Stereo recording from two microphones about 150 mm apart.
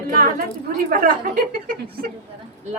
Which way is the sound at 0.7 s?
65° right (ahead or behind).